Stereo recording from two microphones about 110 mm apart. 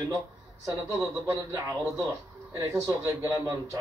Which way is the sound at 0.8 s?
25° right (ahead or behind).